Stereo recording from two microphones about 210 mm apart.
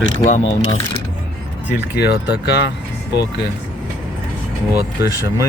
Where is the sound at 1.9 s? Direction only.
50° left (ahead or behind).